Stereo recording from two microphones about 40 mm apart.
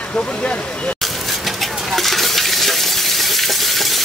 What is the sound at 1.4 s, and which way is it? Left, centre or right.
Coin, centre.